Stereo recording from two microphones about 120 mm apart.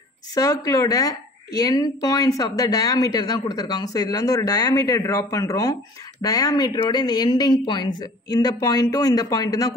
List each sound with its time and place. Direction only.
0.3 s speech: 30° left (ahead or behind)